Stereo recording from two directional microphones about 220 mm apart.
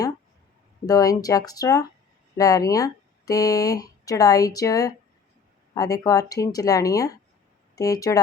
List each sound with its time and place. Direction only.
0.9 s speech: 15° left (ahead or behind)